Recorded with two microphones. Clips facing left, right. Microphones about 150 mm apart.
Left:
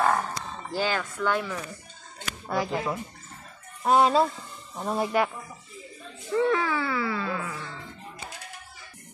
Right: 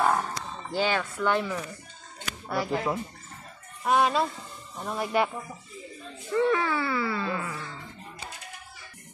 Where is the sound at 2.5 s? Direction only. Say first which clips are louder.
Left 1 dB; 15° left (ahead or behind).